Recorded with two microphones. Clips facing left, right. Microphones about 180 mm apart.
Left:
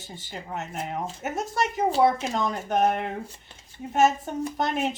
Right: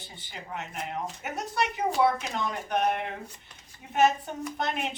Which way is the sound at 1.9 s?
30° left (ahead or behind).